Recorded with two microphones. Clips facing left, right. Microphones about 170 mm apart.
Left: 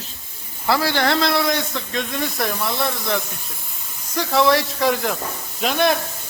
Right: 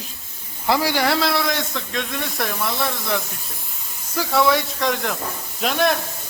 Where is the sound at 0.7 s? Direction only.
15° right (ahead or behind).